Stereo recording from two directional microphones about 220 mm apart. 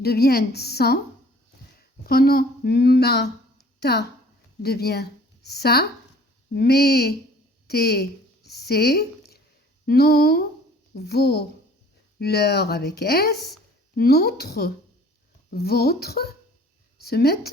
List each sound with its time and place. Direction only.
0.0 s a woman's voice: 45° left (ahead or behind)